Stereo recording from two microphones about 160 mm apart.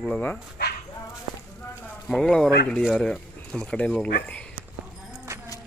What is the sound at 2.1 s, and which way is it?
Speech, centre (ahead or behind).